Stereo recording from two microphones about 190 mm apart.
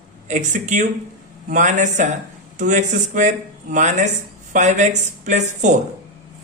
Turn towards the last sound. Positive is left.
turn(degrees=-40)  # may be behind; listen again after turning